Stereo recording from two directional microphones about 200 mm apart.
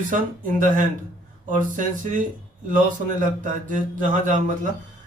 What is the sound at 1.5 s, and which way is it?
A man's voice, 40° right (ahead or behind).